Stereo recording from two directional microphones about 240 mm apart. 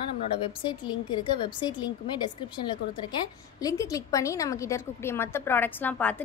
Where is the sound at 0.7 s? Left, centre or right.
Centre.